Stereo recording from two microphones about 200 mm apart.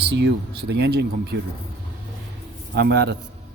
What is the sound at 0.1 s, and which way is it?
Speech, 60° right (ahead or behind).